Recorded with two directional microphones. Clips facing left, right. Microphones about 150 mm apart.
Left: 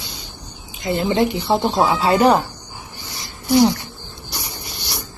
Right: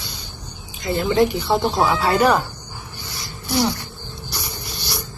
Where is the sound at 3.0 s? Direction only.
20° left (ahead or behind).